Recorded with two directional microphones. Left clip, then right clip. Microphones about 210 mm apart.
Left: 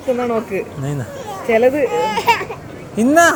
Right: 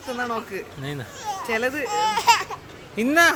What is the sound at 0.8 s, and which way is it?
Children playing, 35° right (ahead or behind).